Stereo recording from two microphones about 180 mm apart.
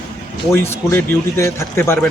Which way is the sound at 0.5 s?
15° left (ahead or behind).